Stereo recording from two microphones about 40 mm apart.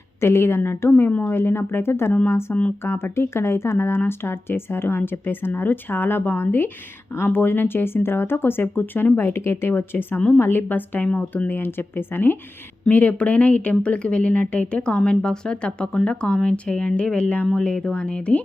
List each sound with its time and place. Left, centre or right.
0.2 s a woman's voice: left
1.3 s a woman's voice: left
2.2 s speech: left
2.8 s speech: left
8.6 s a woman's voice: left
10.7 s a woman's voice: left
11.0 s speech: left
11.5 s speech: left
12.9 s speech: left
17.5 s speech: centre